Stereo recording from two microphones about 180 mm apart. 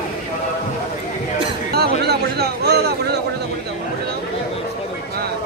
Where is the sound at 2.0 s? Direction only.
65° right (ahead or behind).